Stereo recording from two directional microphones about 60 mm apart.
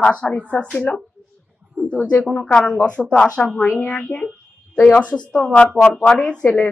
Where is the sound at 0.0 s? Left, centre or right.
Left.